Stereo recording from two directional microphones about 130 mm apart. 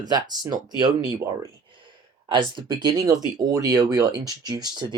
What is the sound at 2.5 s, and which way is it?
Speech, 35° right (ahead or behind).